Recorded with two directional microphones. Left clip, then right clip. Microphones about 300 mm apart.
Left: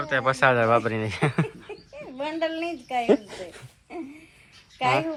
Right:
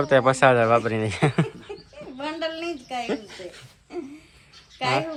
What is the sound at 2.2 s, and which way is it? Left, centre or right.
Speech, left.